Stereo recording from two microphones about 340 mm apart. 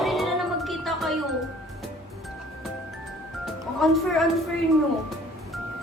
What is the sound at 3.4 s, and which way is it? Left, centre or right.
Music, centre.